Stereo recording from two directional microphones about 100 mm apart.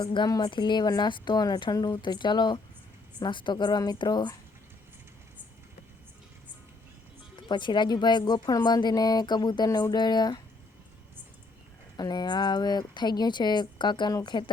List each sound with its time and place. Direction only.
0.0 s a woman's voice: 50° left (ahead or behind)
7.3 s a woman's voice: 50° left (ahead or behind)
11.9 s a woman's voice: 45° left (ahead or behind)